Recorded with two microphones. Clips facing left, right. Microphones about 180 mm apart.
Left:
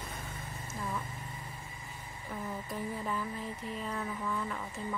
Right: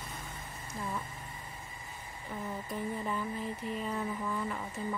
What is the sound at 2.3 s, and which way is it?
A woman's voice, 5° left (ahead or behind).